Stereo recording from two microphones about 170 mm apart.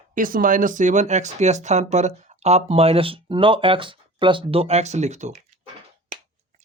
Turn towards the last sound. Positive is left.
turn(degrees=-45)  # may be behind; listen again after turning